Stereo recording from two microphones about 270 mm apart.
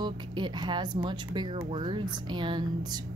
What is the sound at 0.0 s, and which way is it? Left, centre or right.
Speech, centre.